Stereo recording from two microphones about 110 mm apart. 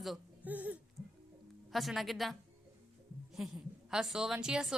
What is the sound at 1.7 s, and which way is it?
Speech, centre (ahead or behind).